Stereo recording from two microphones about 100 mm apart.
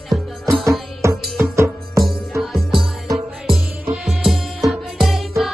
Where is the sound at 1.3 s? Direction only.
30° right (ahead or behind).